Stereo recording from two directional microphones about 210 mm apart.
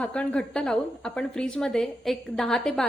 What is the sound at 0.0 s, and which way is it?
A woman's voice, 5° left (ahead or behind).